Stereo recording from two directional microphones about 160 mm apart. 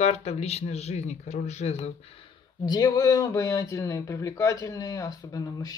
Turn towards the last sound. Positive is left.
turn(degrees=25)  # may be behind; listen again after turning